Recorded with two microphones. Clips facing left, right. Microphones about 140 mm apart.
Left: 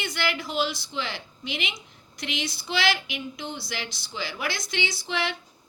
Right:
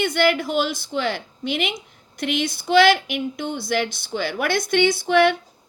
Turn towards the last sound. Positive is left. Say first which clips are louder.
# right 13 dB
turn(degrees=-55)  # may be behind; listen again after turning